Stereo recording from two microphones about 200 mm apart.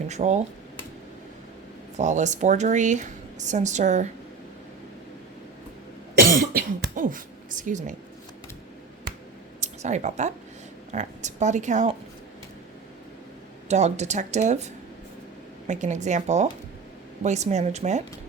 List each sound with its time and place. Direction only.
0.1 s speech: 35° right (ahead or behind)
2.0 s speech: 35° right (ahead or behind)
6.2 s cough: 45° right (ahead or behind)
9.6 s a sound: 35° right (ahead or behind)
10.9 s speech: 35° right (ahead or behind)
13.7 s speech: 35° right (ahead or behind)